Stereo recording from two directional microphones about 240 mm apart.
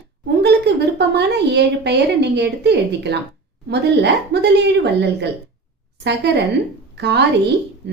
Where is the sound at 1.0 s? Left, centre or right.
Right.